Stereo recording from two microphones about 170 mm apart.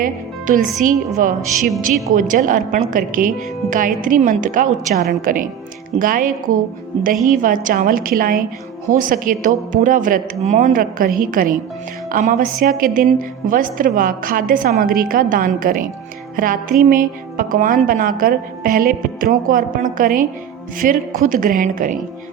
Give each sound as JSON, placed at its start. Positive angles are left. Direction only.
{"t": 0.0, "sound": "a woman's voice", "side_deg": -50}